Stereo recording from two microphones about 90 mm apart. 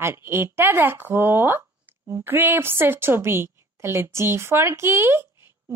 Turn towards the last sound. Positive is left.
turn(degrees=-30)  # may be behind; listen again after turning